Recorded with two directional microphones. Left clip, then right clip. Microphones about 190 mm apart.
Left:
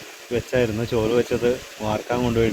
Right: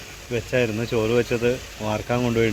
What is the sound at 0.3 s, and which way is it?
Speech, 25° left (ahead or behind).